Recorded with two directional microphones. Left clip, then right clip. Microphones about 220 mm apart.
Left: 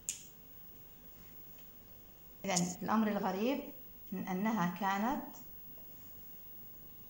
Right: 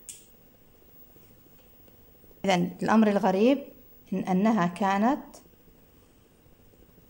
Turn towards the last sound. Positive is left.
turn(degrees=-50)  # may be behind; listen again after turning